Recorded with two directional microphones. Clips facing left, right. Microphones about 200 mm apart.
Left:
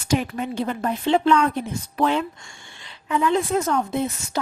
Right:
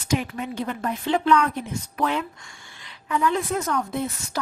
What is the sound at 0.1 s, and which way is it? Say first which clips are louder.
A woman's voice: left 3 dB; 35° left (ahead or behind).